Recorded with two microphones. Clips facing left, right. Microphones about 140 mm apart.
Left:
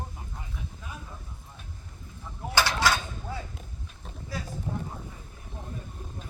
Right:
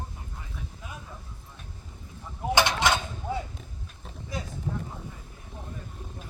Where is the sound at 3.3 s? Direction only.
20° right (ahead or behind).